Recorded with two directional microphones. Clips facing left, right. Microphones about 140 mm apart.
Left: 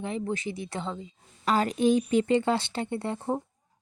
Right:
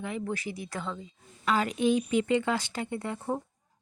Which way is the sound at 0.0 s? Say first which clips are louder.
Left 3 dB; 25° left (ahead or behind).